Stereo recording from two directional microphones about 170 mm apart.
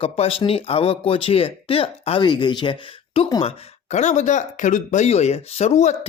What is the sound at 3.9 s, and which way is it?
Speech, 45° left (ahead or behind).